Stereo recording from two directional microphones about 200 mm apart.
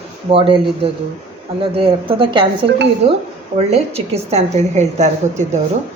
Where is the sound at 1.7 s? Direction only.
25° right (ahead or behind).